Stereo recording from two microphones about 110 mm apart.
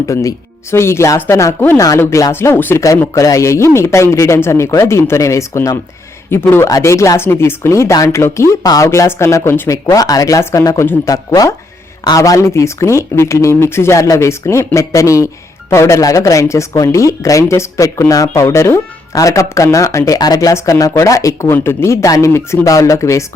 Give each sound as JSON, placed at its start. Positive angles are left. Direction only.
{"t": 0.0, "sound": "speech", "side_deg": 30}